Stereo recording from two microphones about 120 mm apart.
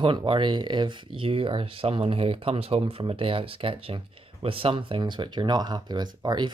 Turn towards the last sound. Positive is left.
turn(degrees=-35)  # may be behind; listen again after turning